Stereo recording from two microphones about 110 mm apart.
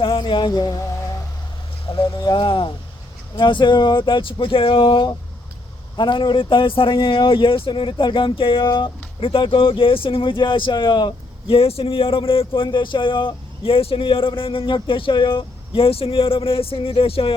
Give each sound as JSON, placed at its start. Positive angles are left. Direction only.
{"t": 0.0, "sound": "music", "side_deg": 50}
{"t": 1.9, "sound": "speech", "side_deg": 45}